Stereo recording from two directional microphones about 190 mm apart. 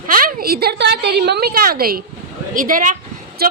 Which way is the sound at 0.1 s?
50° right (ahead or behind).